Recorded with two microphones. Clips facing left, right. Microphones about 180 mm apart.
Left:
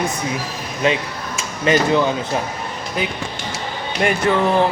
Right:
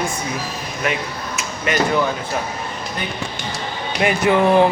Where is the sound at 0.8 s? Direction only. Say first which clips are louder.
Left 5 dB; 25° left (ahead or behind).